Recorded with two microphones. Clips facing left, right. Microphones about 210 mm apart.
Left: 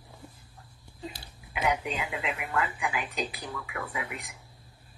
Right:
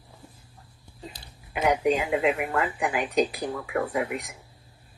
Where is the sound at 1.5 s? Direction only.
45° right (ahead or behind).